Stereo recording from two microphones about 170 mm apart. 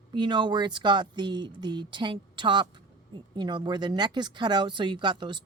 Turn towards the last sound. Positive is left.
turn(degrees=-25)  # may be behind; listen again after turning